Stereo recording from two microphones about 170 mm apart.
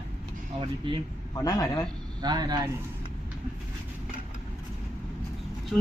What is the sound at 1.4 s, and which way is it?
Speech, 20° left (ahead or behind).